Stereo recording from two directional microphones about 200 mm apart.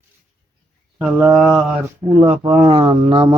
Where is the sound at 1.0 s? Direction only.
5° right (ahead or behind).